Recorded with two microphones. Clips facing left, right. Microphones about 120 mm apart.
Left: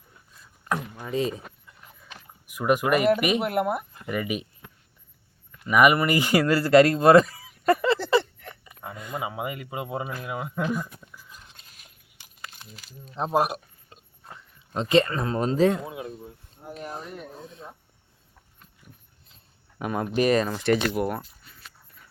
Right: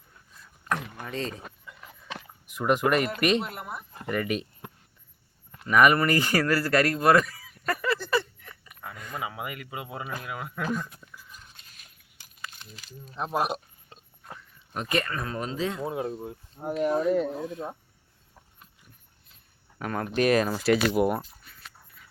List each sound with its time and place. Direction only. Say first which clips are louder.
1.0 s speech: left 9 dB; 10° left (ahead or behind)
1.6 s a sound: right 6 dB; 80° right
2.5 s speech: left 2 dB; 5° left (ahead or behind)
3.4 s speech: left 12 dB; 65° left (ahead or behind)
4.0 s speech: right 4 dB; 5° left (ahead or behind)
5.6 s speech: left 1 dB; 10° left (ahead or behind)
13.1 s speech: left 5 dB; 25° left (ahead or behind)
13.4 s a sound: left 2 dB; 25° right (ahead or behind)
14.3 s speech: left 5 dB; 25° left (ahead or behind); by 15.8 s 45° left (ahead or behind)
15.9 s speech: right 5 dB; 40° right (ahead or behind)
16.2 s speech: right 8 dB; 60° right (ahead or behind)
19.8 s speech: left 3 dB; 15° left (ahead or behind)
20.1 s speech: even; centre (ahead or behind)